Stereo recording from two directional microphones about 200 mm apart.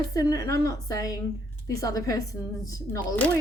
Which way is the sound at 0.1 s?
15° left (ahead or behind).